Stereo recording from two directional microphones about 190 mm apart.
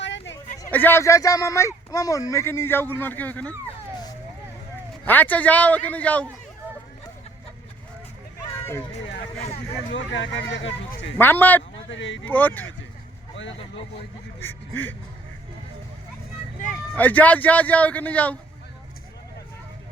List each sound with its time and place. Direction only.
0.0 s a sound: 70° left (ahead or behind)
0.6 s speech: 10° left (ahead or behind)
5.0 s speech: 10° left (ahead or behind)
9.9 s speech: 70° left (ahead or behind)
11.2 s speech: 10° left (ahead or behind)
11.9 s speech: 80° left
12.2 s speech: 10° left (ahead or behind)
14.4 s speech: 10° left (ahead or behind)
17.0 s speech: 10° left (ahead or behind)